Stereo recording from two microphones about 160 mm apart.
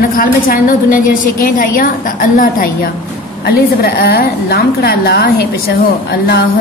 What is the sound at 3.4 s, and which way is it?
A woman's voice, 85° left.